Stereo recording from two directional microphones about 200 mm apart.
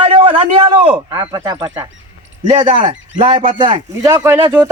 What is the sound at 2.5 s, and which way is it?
A man's voice, 30° right (ahead or behind).